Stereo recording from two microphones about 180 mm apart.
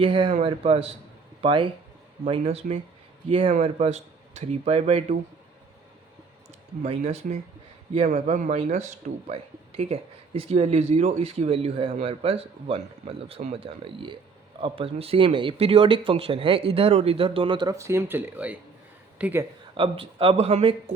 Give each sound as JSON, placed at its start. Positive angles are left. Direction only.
{"t": 0.0, "sound": "speech", "side_deg": -25}
{"t": 6.8, "sound": "speech", "side_deg": -35}
{"t": 19.7, "sound": "speech", "side_deg": -30}